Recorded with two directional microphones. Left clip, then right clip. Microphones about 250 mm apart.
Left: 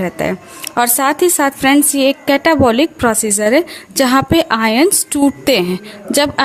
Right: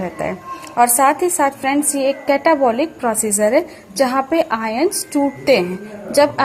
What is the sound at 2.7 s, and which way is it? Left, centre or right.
Speech, left.